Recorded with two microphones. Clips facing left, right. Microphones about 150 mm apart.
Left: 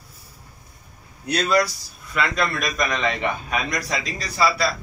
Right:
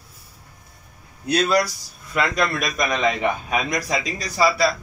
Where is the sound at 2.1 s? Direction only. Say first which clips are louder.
Right 2 dB; 10° right (ahead or behind).